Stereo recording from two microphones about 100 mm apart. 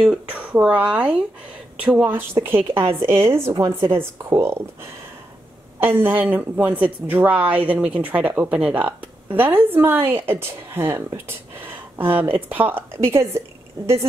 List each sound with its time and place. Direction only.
0.0 s speech: 10° right (ahead or behind)
5.8 s speech: 20° right (ahead or behind)